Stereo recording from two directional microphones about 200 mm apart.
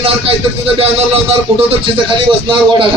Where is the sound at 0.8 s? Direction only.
30° right (ahead or behind).